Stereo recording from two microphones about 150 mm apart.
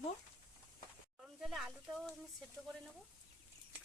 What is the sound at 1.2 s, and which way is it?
Speech, centre (ahead or behind).